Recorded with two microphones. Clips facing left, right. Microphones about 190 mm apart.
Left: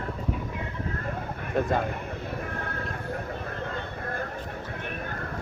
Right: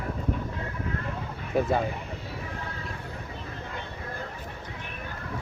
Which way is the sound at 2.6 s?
55° left (ahead or behind).